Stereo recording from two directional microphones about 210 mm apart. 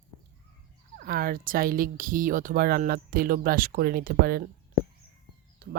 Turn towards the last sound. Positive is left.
turn(degrees=-50)  # may be behind; listen again after turning